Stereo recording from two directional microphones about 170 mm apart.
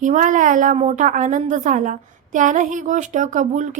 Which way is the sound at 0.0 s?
45° right (ahead or behind).